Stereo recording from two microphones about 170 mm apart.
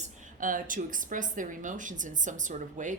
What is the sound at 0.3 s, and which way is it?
A woman's voice, 50° right (ahead or behind).